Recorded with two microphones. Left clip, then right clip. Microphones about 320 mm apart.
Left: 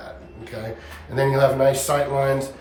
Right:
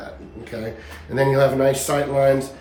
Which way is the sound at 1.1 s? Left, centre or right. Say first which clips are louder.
Right 1 dB; centre.